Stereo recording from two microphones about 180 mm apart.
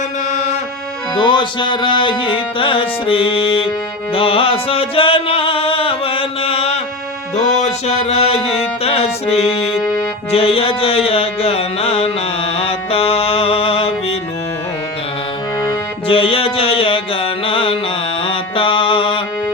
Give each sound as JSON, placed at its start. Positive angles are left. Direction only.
{"t": 0.3, "sound": "music", "side_deg": 40}
{"t": 1.1, "sound": "music", "side_deg": 25}
{"t": 12.5, "sound": "mantra", "side_deg": 35}
{"t": 15.6, "sound": "music", "side_deg": 30}
{"t": 18.3, "sound": "mantra", "side_deg": 30}